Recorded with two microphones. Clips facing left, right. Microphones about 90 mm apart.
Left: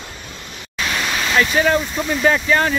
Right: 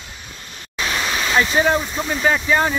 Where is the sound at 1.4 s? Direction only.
20° right (ahead or behind).